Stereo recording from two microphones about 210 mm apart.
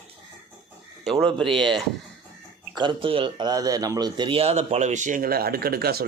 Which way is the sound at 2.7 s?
25° right (ahead or behind).